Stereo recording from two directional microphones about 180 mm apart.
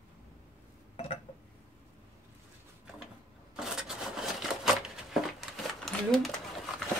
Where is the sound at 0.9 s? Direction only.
35° left (ahead or behind).